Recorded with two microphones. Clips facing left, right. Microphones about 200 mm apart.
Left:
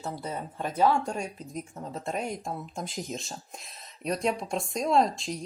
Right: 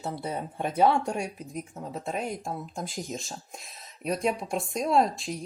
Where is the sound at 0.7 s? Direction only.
30° right (ahead or behind).